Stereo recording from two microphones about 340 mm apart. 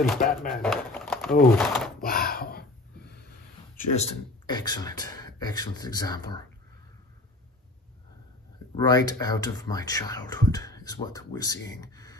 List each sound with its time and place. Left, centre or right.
0.2 s speech: left
0.5 s speech: centre
2.0 s a sound: left
3.9 s speech: centre
8.8 s speech: centre